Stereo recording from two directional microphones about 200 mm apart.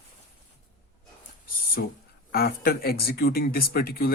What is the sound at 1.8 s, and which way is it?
Speech, 50° left (ahead or behind).